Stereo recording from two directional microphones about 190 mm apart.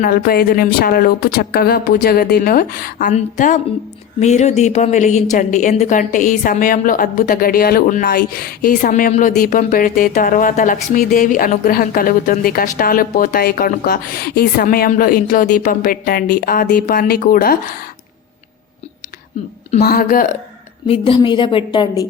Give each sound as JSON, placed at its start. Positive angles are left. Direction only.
{"t": 0.0, "sound": "a woman's voice", "side_deg": 50}
{"t": 19.8, "sound": "a woman's voice", "side_deg": 50}
{"t": 20.8, "sound": "a woman's voice", "side_deg": 30}